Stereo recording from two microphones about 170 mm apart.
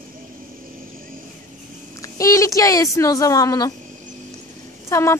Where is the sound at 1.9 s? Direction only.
20° left (ahead or behind).